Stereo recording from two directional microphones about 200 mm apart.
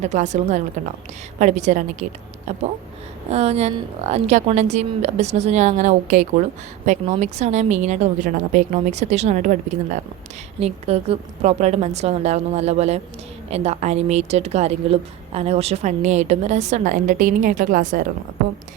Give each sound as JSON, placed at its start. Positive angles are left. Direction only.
{"t": 0.0, "sound": "a woman's voice", "side_deg": -35}
{"t": 3.2, "sound": "a woman's voice", "side_deg": -30}